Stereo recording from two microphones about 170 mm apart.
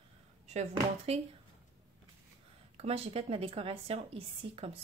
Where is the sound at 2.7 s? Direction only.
35° right (ahead or behind).